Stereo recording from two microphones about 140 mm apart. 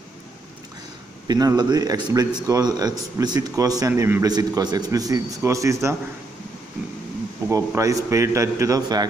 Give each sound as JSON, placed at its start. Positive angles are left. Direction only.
{"t": 1.2, "sound": "speech", "side_deg": -25}
{"t": 7.4, "sound": "speech", "side_deg": -20}